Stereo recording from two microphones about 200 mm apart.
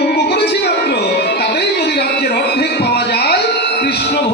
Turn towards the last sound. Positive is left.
turn(degrees=55)  # may be behind; listen again after turning